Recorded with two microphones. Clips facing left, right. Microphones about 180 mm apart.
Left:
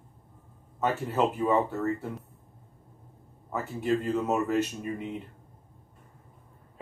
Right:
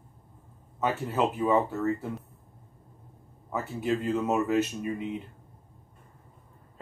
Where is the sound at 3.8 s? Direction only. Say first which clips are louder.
Left 1 dB; centre (ahead or behind).